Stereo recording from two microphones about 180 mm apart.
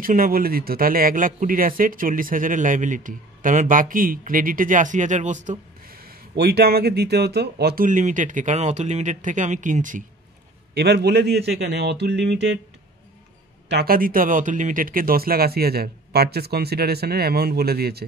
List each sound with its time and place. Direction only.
0.0 s speech: 50° right (ahead or behind)
10.7 s a man's voice: 65° right (ahead or behind)
13.7 s speech: 60° right (ahead or behind)